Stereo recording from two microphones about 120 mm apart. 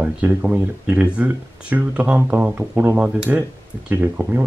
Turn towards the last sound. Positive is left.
turn(degrees=-15)  # may be behind; listen again after turning